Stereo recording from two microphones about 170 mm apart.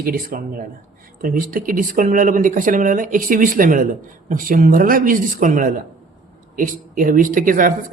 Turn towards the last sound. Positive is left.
turn(degrees=-50)  # may be behind; listen again after turning